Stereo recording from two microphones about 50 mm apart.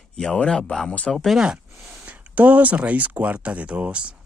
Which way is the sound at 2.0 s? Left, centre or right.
Right.